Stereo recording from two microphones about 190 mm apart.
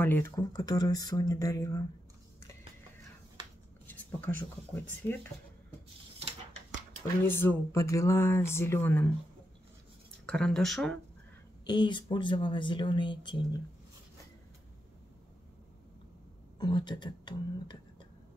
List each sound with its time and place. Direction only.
0.0 s speech: 10° left (ahead or behind)
3.8 s a sound: 10° left (ahead or behind)
7.2 s speech: 15° left (ahead or behind)
10.2 s speech: 5° left (ahead or behind)
11.6 s speech: 25° left (ahead or behind)
16.5 s speech: 25° left (ahead or behind)